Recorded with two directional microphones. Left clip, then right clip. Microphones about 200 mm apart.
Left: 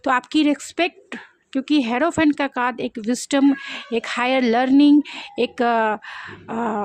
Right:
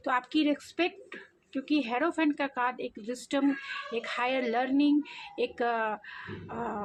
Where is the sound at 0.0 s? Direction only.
55° left (ahead or behind).